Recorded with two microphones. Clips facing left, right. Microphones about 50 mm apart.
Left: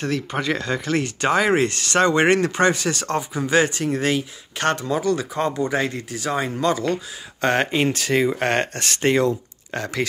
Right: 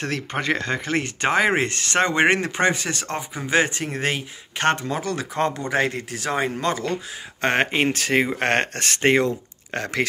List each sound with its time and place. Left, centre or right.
0.3 s speech: right
5.0 s speech: right
6.3 s speech: right